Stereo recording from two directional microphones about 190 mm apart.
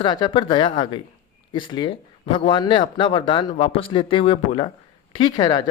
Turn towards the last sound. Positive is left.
turn(degrees=20)  # may be behind; listen again after turning